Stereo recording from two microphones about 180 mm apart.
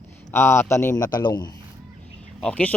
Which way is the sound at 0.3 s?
15° left (ahead or behind).